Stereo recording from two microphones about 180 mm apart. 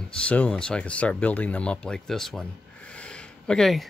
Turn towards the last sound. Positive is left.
turn(degrees=0)  # may be behind; listen again after turning